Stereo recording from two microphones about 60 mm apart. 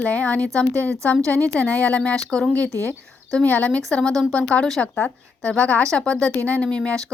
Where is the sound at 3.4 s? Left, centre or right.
Left.